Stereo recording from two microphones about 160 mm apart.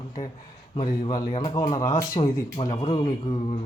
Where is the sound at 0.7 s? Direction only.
35° left (ahead or behind).